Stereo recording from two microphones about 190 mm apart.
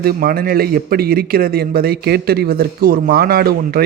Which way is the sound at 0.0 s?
50° right (ahead or behind).